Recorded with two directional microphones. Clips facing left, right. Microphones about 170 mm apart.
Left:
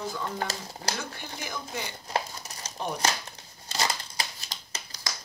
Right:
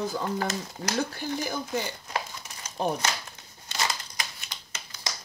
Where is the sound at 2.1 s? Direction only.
35° left (ahead or behind).